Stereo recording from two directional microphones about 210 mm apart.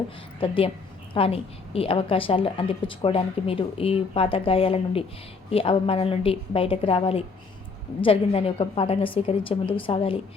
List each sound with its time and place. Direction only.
0.3 s a woman's voice: 25° left (ahead or behind)